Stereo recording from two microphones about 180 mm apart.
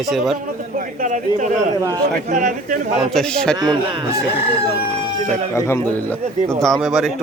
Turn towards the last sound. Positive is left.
turn(degrees=0)  # may be behind; listen again after turning